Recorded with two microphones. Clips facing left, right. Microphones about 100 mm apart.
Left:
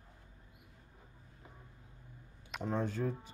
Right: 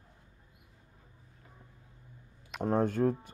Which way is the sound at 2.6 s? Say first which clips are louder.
Right 8 dB; 50° right (ahead or behind).